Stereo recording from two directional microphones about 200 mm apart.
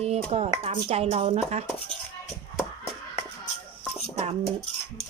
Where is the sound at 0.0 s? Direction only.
30° right (ahead or behind).